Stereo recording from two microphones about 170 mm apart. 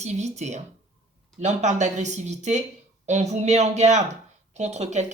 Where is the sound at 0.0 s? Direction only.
40° right (ahead or behind).